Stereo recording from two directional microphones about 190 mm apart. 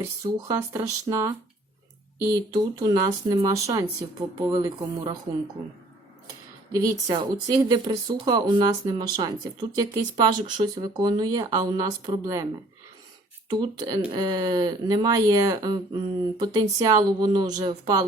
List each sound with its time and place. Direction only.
0.3 s speech: 15° right (ahead or behind)
2.3 s speech: 20° right (ahead or behind)
7.1 s speech: 20° right (ahead or behind)
13.5 s speech: 20° right (ahead or behind)